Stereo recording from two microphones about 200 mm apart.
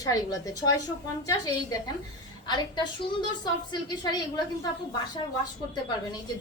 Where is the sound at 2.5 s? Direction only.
20° left (ahead or behind).